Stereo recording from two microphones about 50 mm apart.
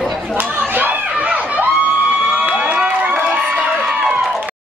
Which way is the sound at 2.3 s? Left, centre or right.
Centre.